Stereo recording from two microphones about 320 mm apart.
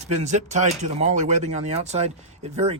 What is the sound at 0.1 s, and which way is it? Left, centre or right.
Speech, right.